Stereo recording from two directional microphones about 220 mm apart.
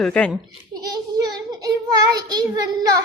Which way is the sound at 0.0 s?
5° left (ahead or behind).